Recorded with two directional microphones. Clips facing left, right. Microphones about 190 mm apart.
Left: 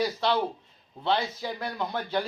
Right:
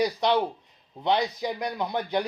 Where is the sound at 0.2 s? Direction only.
15° right (ahead or behind).